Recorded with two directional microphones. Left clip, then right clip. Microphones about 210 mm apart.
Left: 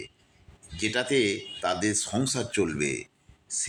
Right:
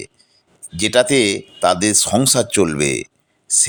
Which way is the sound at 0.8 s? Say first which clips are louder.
Right 11 dB; 55° right (ahead or behind).